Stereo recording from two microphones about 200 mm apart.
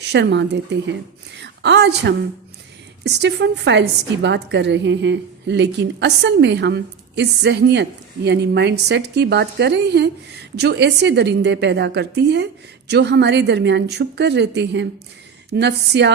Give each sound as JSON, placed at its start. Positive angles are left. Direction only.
{"t": 0.0, "sound": "a woman's voice", "side_deg": -60}